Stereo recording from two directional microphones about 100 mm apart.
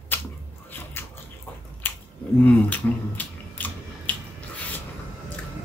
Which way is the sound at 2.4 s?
15° left (ahead or behind).